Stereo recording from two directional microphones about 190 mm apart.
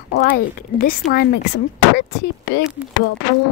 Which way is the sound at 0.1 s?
50° left (ahead or behind).